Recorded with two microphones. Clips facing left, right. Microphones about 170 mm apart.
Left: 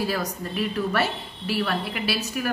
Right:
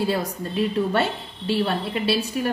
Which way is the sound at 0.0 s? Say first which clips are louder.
Right 3 dB; 25° right (ahead or behind).